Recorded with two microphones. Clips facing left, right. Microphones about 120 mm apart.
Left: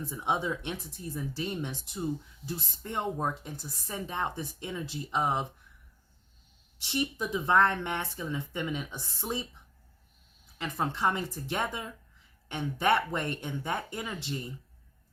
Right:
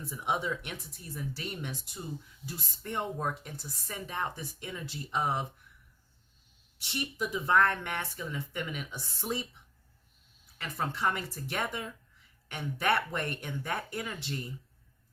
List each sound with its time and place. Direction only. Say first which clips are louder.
0.0 s speech: left 2 dB; 20° left (ahead or behind)
6.8 s speech: left 3 dB; 20° left (ahead or behind)
10.6 s speech: left 3 dB; 20° left (ahead or behind)